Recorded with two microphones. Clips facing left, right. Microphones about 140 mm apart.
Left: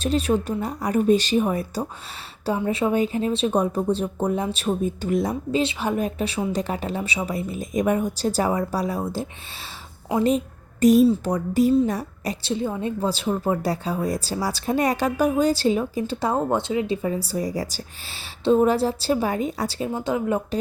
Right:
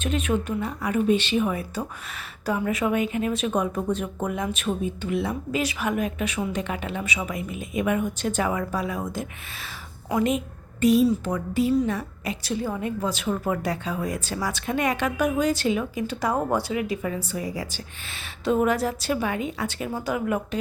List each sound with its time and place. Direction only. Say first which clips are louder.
0.0 s a woman's voice: left 4 dB; 35° left (ahead or behind)
19.9 s a woman's voice: left 2 dB; 25° left (ahead or behind)